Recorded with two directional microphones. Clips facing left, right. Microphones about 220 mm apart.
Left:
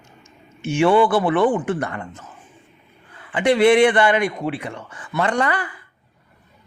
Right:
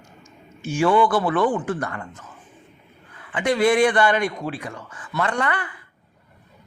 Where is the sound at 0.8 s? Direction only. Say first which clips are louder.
Left 3 dB; 25° left (ahead or behind).